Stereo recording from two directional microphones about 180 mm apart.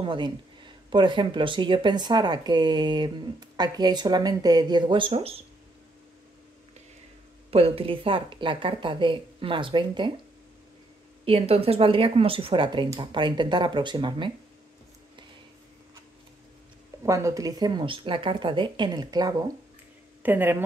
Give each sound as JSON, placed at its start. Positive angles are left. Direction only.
{"t": 0.0, "sound": "speech", "side_deg": -25}
{"t": 7.5, "sound": "speech", "side_deg": -30}
{"t": 11.2, "sound": "speech", "side_deg": -30}
{"t": 17.0, "sound": "speech", "side_deg": -20}